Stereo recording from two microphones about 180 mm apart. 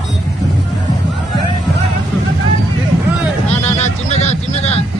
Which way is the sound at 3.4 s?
35° left (ahead or behind).